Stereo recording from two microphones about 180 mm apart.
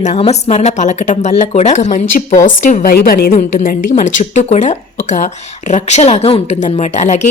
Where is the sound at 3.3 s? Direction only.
45° left (ahead or behind).